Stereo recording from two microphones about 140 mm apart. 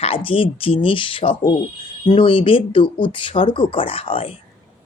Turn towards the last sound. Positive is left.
turn(degrees=40)  # may be behind; listen again after turning